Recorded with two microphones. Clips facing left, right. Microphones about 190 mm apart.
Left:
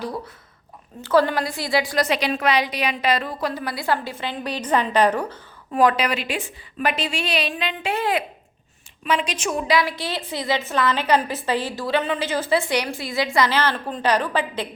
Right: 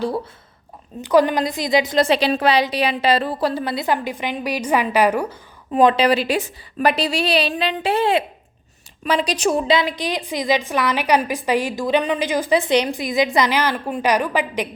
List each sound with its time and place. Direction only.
1.0 s a woman's voice: 15° right (ahead or behind)
5.7 s a woman's voice: 25° right (ahead or behind)